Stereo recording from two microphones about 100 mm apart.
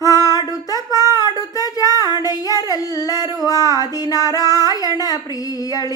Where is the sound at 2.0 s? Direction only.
40° right (ahead or behind).